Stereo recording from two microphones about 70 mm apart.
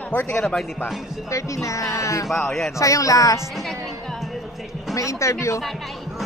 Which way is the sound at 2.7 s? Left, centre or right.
Left.